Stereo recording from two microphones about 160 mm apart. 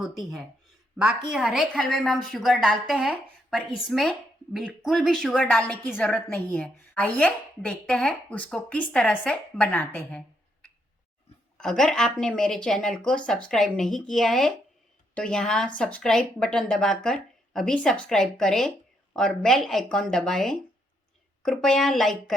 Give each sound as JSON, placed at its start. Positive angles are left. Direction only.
{"t": 0.0, "sound": "a woman's voice", "side_deg": 0}